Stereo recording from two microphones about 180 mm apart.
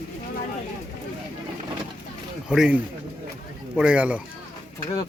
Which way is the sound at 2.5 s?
5° right (ahead or behind).